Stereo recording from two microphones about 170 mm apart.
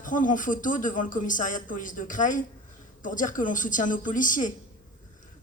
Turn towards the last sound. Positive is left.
turn(degrees=50)  # may be behind; listen again after turning